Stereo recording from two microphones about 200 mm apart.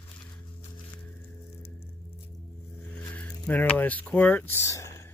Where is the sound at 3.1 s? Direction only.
5° left (ahead or behind).